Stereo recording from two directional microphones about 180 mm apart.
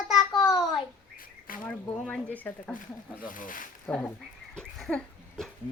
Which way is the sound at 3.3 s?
50° left (ahead or behind).